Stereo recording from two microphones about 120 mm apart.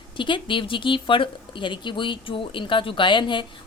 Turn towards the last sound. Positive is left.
turn(degrees=40)  # may be behind; listen again after turning